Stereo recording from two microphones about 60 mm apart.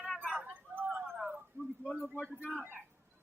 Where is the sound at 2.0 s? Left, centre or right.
Centre.